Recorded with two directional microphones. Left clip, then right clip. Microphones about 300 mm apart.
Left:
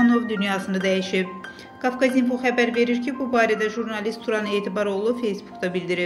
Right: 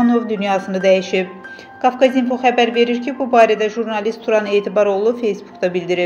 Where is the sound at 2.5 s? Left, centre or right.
Left.